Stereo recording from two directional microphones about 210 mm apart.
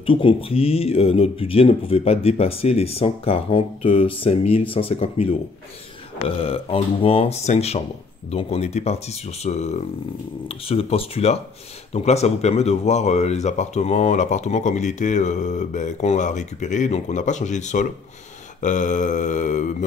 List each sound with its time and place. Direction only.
0.0 s speech: 25° left (ahead or behind)